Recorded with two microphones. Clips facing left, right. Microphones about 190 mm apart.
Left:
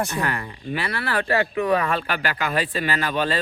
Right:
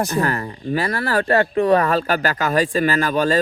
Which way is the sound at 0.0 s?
40° right (ahead or behind).